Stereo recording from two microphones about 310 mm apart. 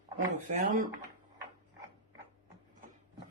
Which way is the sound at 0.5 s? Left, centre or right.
Right.